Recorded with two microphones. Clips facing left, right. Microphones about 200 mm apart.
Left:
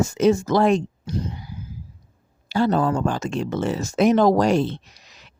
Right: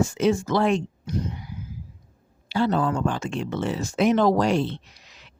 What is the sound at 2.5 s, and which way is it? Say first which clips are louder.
Speech: left 3 dB; 45° left (ahead or behind).